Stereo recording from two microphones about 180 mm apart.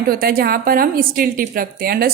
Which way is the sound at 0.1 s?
55° right (ahead or behind).